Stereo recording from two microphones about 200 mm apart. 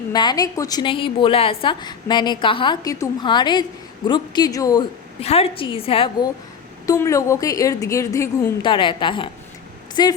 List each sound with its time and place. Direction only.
0.1 s a woman's voice: 20° left (ahead or behind)
5.2 s a woman's voice: 30° left (ahead or behind)
6.8 s a woman's voice: 15° left (ahead or behind)